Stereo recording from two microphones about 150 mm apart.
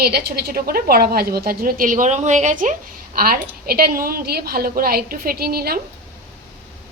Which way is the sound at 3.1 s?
75° right (ahead or behind).